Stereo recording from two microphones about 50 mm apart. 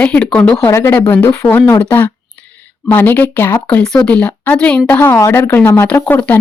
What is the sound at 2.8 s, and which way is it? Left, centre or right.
Speech, left.